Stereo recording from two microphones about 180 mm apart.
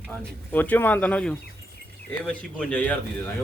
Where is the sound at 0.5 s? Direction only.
10° left (ahead or behind).